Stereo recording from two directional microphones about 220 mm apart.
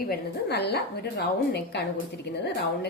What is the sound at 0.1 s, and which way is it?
A woman's voice, 50° left (ahead or behind).